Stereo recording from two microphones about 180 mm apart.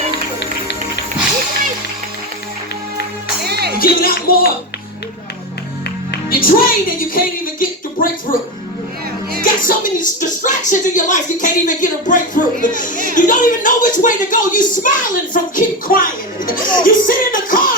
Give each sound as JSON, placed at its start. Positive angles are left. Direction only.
{"t": 3.4, "sound": "music", "side_deg": -65}
{"t": 3.8, "sound": "music", "side_deg": 55}
{"t": 6.4, "sound": "speech", "side_deg": 55}
{"t": 7.6, "sound": "a sound", "side_deg": 50}
{"t": 9.4, "sound": "speech", "side_deg": 50}